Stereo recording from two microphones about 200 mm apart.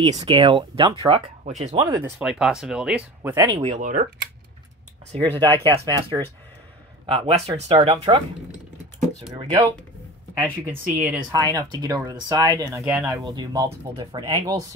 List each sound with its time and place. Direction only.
0.0 s speech: 25° right (ahead or behind)
2.1 s speech: 5° right (ahead or behind)
3.2 s speech: 15° right (ahead or behind)
3.5 s speech: 30° right (ahead or behind)
3.8 s speech: 40° right (ahead or behind)
5.1 s speech: 30° right (ahead or behind)
10.4 s speech: 10° right (ahead or behind)